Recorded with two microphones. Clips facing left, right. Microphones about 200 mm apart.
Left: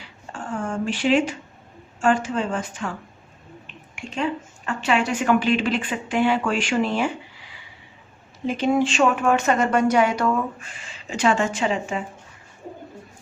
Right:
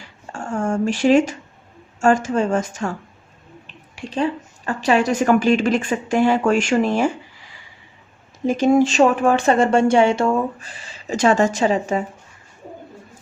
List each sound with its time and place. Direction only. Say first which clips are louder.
0.0 s a sound: right 3 dB; 45° right (ahead or behind)
2.0 s speech: right 4 dB; 45° right (ahead or behind)
3.9 s speech: right 4 dB; 35° right (ahead or behind)